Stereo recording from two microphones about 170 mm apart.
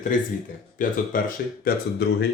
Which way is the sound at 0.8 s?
50° left (ahead or behind).